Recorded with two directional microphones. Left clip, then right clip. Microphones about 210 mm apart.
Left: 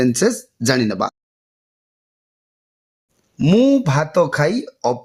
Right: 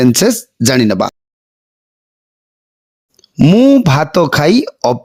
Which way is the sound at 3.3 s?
35° right (ahead or behind).